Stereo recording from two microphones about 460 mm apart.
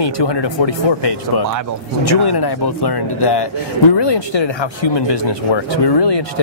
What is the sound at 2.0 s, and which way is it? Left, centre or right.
Speech, left.